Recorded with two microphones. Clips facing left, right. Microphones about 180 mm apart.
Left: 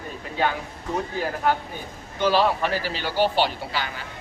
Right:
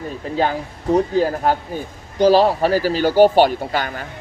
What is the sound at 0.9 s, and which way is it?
Speech, 35° right (ahead or behind).